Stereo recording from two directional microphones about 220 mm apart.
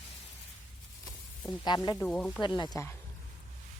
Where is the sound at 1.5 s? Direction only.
20° left (ahead or behind).